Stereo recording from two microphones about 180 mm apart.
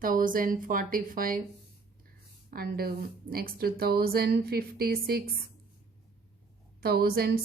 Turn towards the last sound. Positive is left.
turn(degrees=-60)  # may be behind; listen again after turning